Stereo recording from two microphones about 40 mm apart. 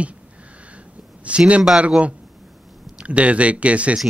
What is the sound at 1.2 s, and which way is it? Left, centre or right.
Speech, right.